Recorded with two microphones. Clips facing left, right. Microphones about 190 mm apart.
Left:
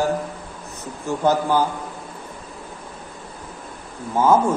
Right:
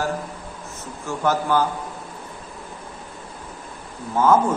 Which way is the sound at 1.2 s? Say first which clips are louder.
Left 2 dB; 15° left (ahead or behind).